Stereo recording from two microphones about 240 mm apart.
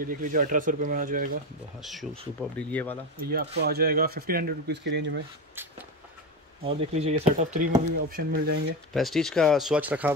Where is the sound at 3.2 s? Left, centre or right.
Right.